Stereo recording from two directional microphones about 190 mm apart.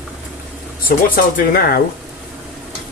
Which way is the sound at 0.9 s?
50° left (ahead or behind).